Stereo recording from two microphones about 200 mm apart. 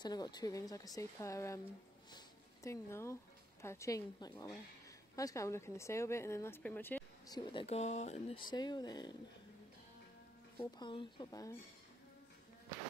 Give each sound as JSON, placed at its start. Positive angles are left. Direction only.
{"t": 0.0, "sound": "a woman's voice", "side_deg": 20}
{"t": 2.1, "sound": "a sound", "side_deg": 15}
{"t": 3.6, "sound": "a woman's voice", "side_deg": 15}
{"t": 7.3, "sound": "speech", "side_deg": 30}
{"t": 8.5, "sound": "speech", "side_deg": 20}
{"t": 10.8, "sound": "speech", "side_deg": 25}